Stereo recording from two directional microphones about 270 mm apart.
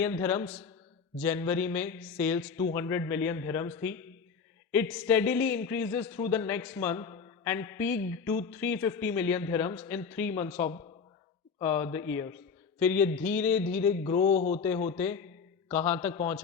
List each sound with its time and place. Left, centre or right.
0.0 s a man's voice: centre
14.0 s a man's voice: left
14.6 s a man's voice: centre